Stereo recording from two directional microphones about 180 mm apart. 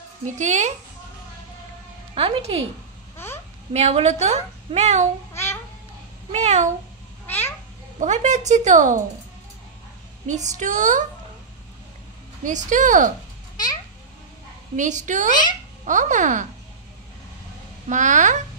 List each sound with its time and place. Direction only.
0.4 s a woman's voice: 40° right (ahead or behind)
2.1 s speech: 30° right (ahead or behind)
3.7 s a woman's voice: 35° right (ahead or behind)
5.3 s babbling: 15° left (ahead or behind)
6.3 s a woman's voice: 40° right (ahead or behind)
7.2 s a sound: 10° left (ahead or behind)
8.0 s a woman's voice: 40° right (ahead or behind)
10.2 s a woman's voice: 40° right (ahead or behind)
12.4 s a woman's voice: 45° right (ahead or behind)
14.8 s a woman's voice: 40° right (ahead or behind)
17.8 s a woman's voice: 45° right (ahead or behind)